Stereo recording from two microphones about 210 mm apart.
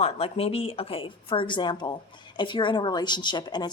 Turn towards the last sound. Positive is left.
turn(degrees=20)  # may be behind; listen again after turning